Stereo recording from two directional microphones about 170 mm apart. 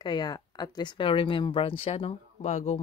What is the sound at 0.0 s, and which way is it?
A woman's voice, 25° left (ahead or behind).